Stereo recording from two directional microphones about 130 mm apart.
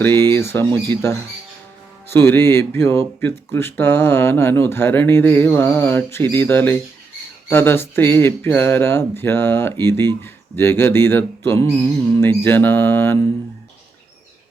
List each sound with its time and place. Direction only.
0.0 s speech: 15° left (ahead or behind)